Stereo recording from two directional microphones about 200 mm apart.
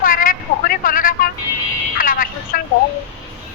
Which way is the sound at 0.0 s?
45° left (ahead or behind).